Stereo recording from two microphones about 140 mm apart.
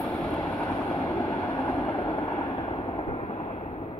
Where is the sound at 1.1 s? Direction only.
25° left (ahead or behind).